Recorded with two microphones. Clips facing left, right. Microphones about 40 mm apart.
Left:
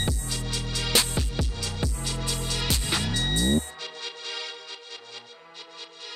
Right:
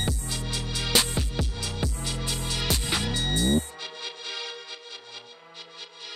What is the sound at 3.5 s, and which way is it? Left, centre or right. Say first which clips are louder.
Music: right 1 dB; left.